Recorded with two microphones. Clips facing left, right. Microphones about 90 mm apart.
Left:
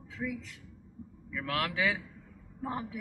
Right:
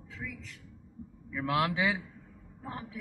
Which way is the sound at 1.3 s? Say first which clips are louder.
Right 4 dB; 15° right (ahead or behind).